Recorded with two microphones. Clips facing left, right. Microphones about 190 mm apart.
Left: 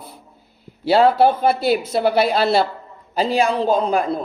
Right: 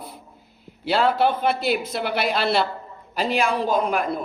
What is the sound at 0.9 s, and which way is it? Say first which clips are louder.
A woman's voice: left 6 dB; 35° left (ahead or behind).